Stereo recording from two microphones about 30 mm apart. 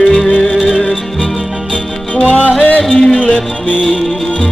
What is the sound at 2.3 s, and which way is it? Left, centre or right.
Music, left.